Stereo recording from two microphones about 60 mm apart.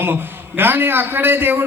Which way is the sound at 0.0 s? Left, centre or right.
Right.